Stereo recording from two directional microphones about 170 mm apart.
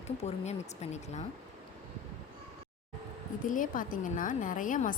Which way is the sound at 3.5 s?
50° left (ahead or behind).